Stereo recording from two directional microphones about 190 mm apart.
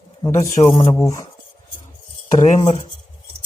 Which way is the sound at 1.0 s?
15° left (ahead or behind).